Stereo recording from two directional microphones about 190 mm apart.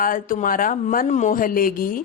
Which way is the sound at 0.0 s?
45° left (ahead or behind).